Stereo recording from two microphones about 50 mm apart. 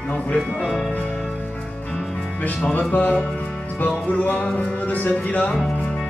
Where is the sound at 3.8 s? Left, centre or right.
Left.